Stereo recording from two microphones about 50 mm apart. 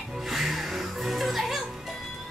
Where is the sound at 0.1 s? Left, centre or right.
Centre.